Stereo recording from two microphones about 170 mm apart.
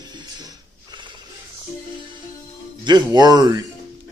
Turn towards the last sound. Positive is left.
turn(degrees=-20)  # may be behind; listen again after turning